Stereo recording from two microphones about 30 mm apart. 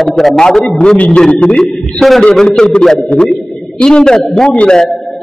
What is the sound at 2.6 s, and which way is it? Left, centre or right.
Speech, left.